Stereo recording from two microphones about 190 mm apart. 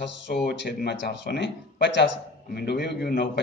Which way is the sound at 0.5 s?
60° left (ahead or behind).